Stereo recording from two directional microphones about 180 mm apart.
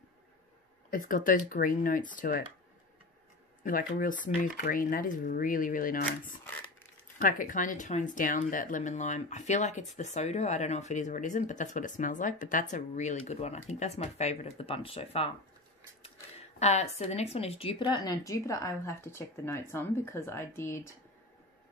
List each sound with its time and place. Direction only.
0.8 s speech: 50° left (ahead or behind)
3.6 s speech: 50° left (ahead or behind); by 20.9 s 15° left (ahead or behind)